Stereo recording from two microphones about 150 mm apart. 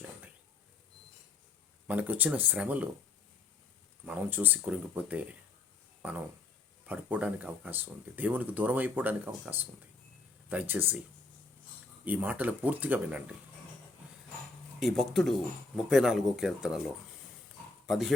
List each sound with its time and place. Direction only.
1.9 s speech: 10° right (ahead or behind)
4.0 s speech: 10° right (ahead or behind)
12.0 s speech: 10° right (ahead or behind)
14.8 s speech: centre (ahead or behind)